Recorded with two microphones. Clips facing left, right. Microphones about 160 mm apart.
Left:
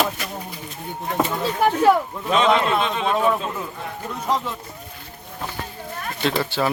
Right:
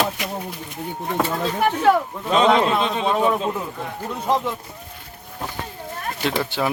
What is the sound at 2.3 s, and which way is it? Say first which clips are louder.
Speech: right 2 dB; 30° right (ahead or behind).